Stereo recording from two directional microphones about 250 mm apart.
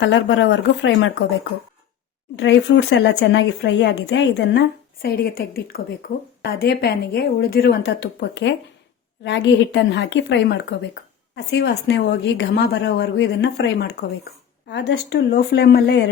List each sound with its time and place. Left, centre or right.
0.0 s a woman's voice: left
2.3 s a woman's voice: left